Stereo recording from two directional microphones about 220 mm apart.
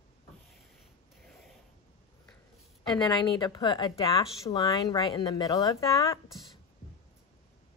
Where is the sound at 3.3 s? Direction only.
20° left (ahead or behind).